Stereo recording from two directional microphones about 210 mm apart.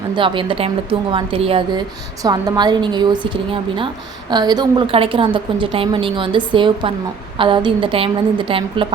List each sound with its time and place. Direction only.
0.2 s a woman's voice: 25° right (ahead or behind)